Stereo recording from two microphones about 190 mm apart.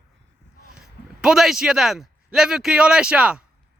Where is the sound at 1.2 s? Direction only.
Centre (ahead or behind).